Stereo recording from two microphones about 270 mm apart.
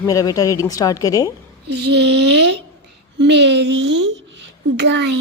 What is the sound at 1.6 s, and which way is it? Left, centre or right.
A child's voice, right.